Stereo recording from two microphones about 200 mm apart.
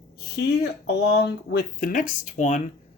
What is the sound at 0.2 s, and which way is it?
Speech, 55° left (ahead or behind).